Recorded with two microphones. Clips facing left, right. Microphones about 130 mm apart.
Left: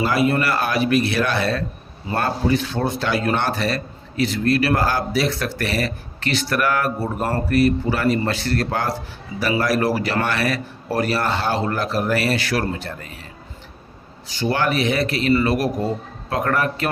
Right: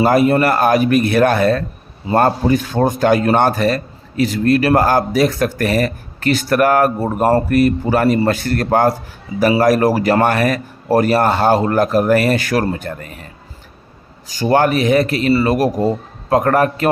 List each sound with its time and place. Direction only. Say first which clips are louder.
0.0 s speech: right 7 dB; 45° right (ahead or behind)
14.3 s a man's voice: right 7 dB; 45° right (ahead or behind)